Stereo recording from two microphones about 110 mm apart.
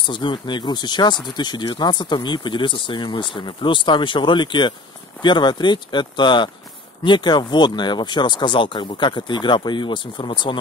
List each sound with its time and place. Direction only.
0.0 s speech: 45° left (ahead or behind)